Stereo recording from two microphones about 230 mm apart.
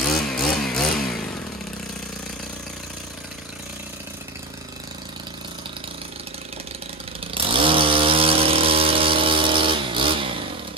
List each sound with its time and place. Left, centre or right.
0.3 s chainsaw: centre
7.3 s chainsaw: right